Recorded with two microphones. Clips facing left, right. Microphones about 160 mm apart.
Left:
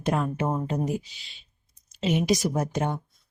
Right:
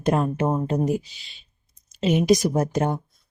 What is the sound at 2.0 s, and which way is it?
Speech, 45° right (ahead or behind).